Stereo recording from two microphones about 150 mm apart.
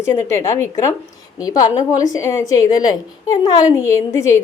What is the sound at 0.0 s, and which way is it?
A woman's voice, 20° left (ahead or behind).